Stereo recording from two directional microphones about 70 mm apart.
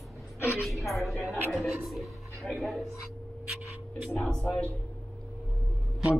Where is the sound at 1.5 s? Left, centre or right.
Centre.